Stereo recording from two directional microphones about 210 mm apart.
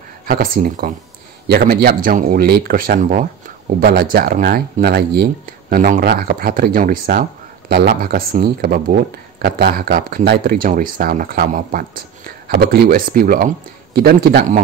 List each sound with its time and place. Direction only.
0.3 s speech: 40° right (ahead or behind)
3.8 s speech: 50° right (ahead or behind)